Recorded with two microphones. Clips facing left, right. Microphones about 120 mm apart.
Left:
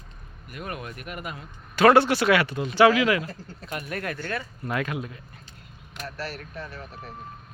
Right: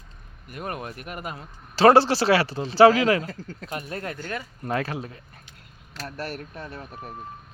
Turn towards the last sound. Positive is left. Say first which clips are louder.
# right 2 dB
turn(degrees=-55)  # may be behind; listen again after turning